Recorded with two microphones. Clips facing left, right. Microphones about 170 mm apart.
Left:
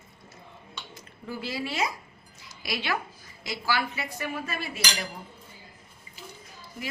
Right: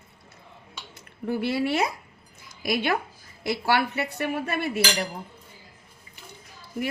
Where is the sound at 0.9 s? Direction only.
60° right (ahead or behind).